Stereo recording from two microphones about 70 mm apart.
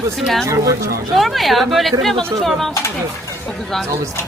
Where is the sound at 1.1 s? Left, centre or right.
Centre.